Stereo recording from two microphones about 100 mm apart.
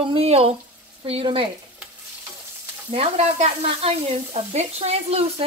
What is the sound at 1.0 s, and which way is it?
Speech, 70° right (ahead or behind).